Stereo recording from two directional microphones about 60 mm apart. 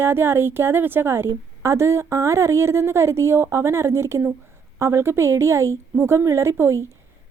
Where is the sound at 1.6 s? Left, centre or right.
Right.